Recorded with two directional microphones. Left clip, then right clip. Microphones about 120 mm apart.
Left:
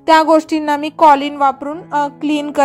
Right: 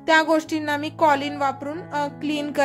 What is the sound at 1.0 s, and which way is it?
A woman's voice, 30° left (ahead or behind).